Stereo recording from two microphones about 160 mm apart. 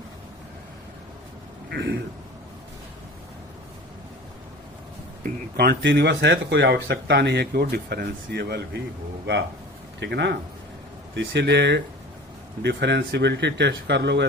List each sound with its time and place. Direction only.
1.7 s speech: 90° right
5.2 s speech: 75° right (ahead or behind)
10.0 s speech: 90° right